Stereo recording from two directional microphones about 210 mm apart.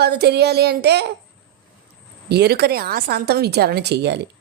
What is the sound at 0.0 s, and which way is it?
A woman's voice, 50° right (ahead or behind).